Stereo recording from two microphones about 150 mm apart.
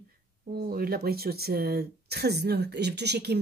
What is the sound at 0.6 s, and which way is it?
Speech, 85° right.